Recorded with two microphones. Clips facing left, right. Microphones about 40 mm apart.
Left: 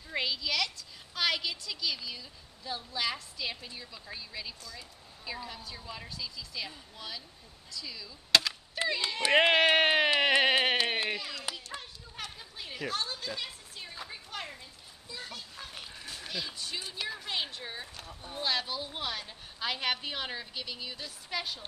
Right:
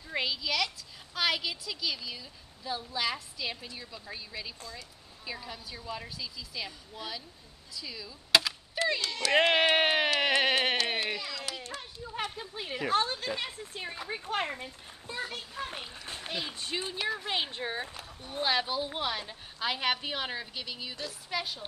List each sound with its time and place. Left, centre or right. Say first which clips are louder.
0.1 s a woman's voice: right 1 dB; centre
9.0 s speech: left 2 dB; left
9.5 s a woman's voice: left 1 dB; centre
10.2 s music: left 1 dB; centre
12.2 s a woman's voice: right 6 dB; right
15.6 s a sound: right 6 dB; right
16.1 s speech: right 2 dB; right
17.0 s a woman's voice: right 3 dB; centre
17.9 s a woman's voice: right 3 dB; centre